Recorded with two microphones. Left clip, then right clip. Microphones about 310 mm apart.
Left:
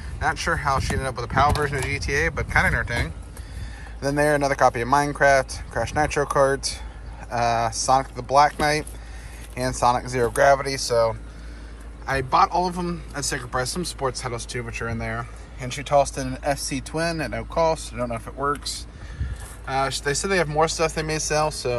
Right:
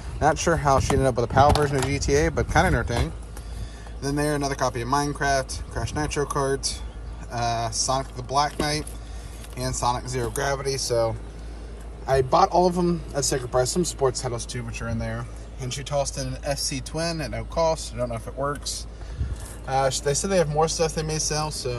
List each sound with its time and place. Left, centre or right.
0.2 s speech: right
1.9 s a man's voice: centre
9.8 s a man's voice: centre
12.1 s a man's voice: centre